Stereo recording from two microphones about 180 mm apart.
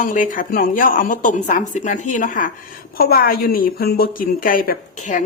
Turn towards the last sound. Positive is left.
turn(degrees=45)  # may be behind; listen again after turning